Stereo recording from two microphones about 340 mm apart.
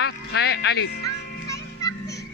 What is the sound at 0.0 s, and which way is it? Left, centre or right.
Speech, left.